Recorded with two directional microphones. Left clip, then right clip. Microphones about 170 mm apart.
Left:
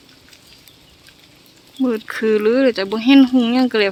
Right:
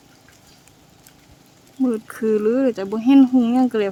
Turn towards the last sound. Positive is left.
turn(degrees=0)  # may be behind; listen again after turning